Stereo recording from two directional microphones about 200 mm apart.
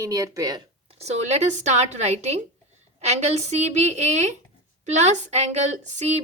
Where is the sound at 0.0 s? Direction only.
15° right (ahead or behind).